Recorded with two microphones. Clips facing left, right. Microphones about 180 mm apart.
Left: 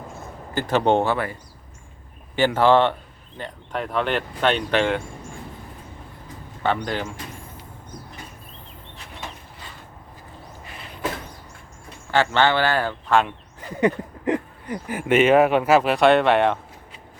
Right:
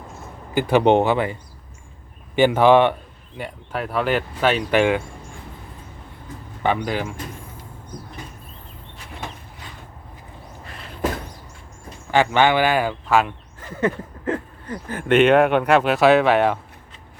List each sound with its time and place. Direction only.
0.5 s speech: 15° right (ahead or behind)
6.6 s speech: 10° right (ahead or behind)
12.1 s speech: 15° right (ahead or behind)
13.6 s speech: 15° left (ahead or behind); by 16.6 s centre (ahead or behind)